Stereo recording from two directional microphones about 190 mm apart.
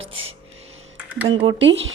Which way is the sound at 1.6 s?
75° right (ahead or behind).